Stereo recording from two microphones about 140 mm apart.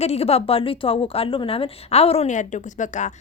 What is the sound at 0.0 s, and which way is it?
A woman's voice, 50° left (ahead or behind).